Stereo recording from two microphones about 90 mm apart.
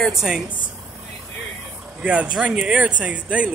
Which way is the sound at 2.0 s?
10° right (ahead or behind).